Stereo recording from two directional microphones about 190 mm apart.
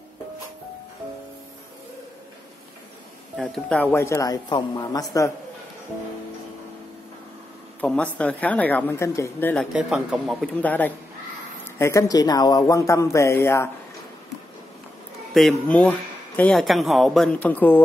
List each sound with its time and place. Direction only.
3.3 s speech: 5° left (ahead or behind); by 5.0 s 20° left (ahead or behind)
7.8 s speech: 5° left (ahead or behind)
9.7 s speech: 5° right (ahead or behind); by 13.7 s 15° left (ahead or behind)
15.3 s speech: 5° left (ahead or behind)